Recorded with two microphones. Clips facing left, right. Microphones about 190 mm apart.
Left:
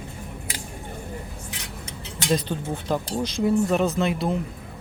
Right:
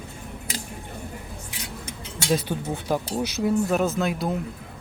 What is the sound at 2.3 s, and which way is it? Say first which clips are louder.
Speech: even; 10° right (ahead or behind).